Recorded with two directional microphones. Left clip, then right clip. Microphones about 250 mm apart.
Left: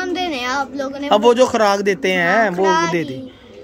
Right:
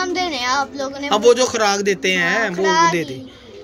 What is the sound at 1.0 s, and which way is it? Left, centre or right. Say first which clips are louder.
Speech: left 1 dB; centre.